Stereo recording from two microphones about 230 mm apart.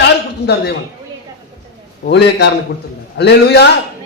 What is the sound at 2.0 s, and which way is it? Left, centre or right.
A woman's voice, left.